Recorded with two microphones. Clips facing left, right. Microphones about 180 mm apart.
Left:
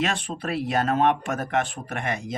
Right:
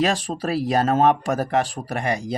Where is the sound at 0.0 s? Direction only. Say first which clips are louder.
Right 5 dB; 35° right (ahead or behind).